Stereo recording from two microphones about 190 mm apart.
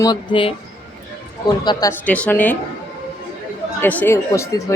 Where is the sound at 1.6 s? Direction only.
15° left (ahead or behind).